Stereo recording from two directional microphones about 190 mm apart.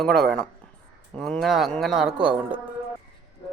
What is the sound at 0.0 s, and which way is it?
Speech, centre (ahead or behind).